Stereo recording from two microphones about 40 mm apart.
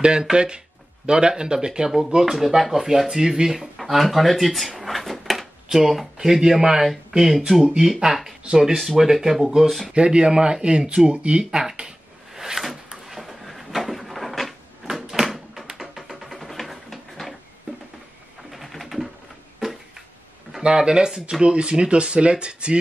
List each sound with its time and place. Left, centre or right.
0.0 s speech: right
2.3 s speech: centre
9.9 s speech: right
12.4 s drawer open or close: centre
13.1 s cupboard open or close: centre
15.0 s door: centre
15.2 s a sound: centre
15.8 s music: centre
18.5 s pigeon: centre
20.6 s speech: centre